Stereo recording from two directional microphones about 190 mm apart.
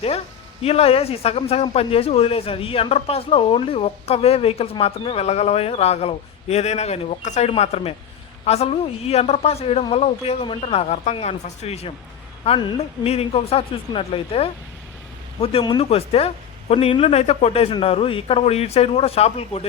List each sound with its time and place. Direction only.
0.6 s a man's voice: 30° left (ahead or behind)